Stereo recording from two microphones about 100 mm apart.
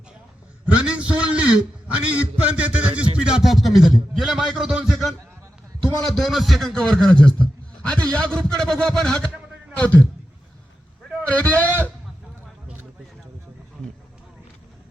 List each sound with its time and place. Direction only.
0.6 s a man's voice: 10° right (ahead or behind); by 10.1 s 15° left (ahead or behind)
11.2 s a man's voice: 15° left (ahead or behind)